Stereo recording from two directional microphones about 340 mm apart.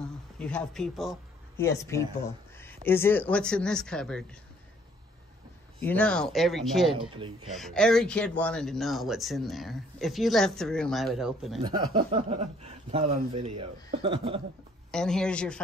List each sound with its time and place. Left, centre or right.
0.4 s speech: centre
5.8 s speech: centre
12.0 s speech: centre
14.9 s speech: centre